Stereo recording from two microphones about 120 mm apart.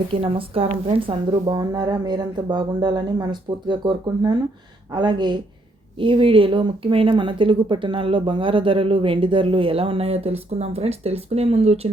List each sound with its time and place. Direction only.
0.1 s a woman's voice: 50° right (ahead or behind)